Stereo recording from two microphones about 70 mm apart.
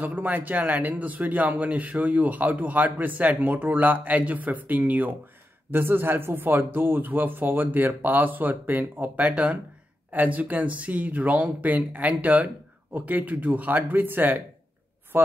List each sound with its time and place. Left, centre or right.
0.0 s a man's voice: right